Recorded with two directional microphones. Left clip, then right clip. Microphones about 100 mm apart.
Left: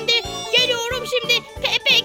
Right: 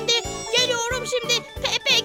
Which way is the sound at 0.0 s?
25° left (ahead or behind).